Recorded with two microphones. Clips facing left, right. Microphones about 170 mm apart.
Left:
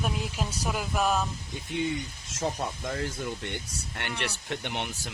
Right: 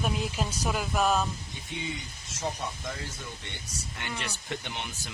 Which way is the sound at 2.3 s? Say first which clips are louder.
Left 3 dB; 50° left (ahead or behind).